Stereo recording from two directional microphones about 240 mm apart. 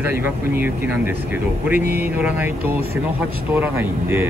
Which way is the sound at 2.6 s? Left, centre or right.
Right.